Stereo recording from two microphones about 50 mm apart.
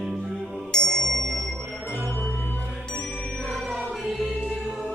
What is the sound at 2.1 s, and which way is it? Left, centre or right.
Music, left.